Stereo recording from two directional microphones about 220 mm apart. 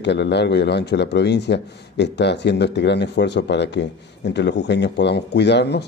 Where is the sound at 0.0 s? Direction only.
50° left (ahead or behind).